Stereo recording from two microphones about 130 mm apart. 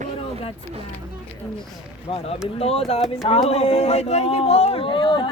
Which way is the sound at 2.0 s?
50° left (ahead or behind).